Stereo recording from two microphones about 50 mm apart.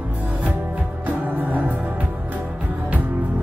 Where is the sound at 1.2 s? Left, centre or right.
Right.